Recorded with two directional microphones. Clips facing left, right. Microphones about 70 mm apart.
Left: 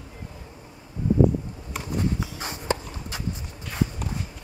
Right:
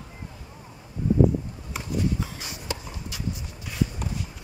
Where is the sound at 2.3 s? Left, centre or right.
Left.